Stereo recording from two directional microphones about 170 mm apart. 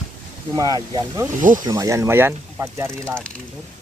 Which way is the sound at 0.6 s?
20° right (ahead or behind).